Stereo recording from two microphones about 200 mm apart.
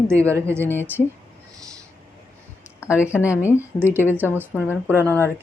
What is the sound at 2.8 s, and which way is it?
Speech, 5° right (ahead or behind).